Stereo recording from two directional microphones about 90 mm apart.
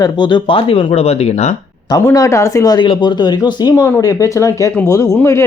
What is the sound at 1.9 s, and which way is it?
Speech, 40° left (ahead or behind).